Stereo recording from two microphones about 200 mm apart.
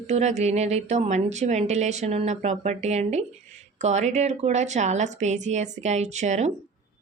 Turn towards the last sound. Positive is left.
turn(degrees=-35)  # may be behind; listen again after turning